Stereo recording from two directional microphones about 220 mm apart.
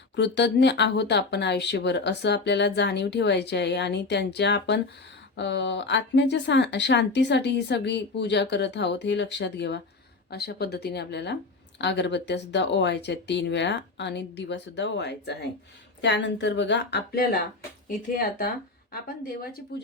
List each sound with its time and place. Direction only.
0.2 s speech: 50° left (ahead or behind)